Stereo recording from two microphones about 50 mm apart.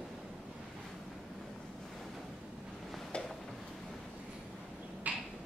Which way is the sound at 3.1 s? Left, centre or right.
Centre.